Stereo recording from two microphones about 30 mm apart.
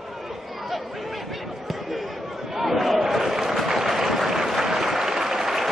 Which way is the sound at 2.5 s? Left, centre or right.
Centre.